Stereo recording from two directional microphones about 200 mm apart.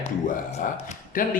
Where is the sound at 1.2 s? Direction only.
40° left (ahead or behind).